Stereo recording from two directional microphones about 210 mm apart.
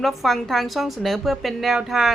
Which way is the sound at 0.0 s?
Centre (ahead or behind).